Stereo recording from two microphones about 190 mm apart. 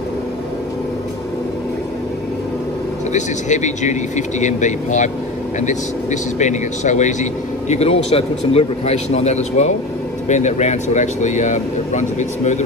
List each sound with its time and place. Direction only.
3.1 s a man's voice: 40° left (ahead or behind)
6.4 s a man's voice: 40° left (ahead or behind)